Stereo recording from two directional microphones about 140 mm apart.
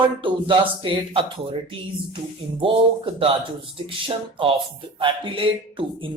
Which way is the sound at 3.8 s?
40° right (ahead or behind).